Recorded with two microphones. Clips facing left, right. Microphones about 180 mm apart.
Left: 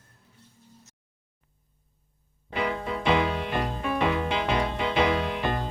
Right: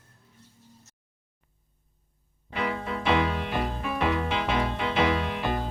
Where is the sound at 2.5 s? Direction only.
Centre (ahead or behind).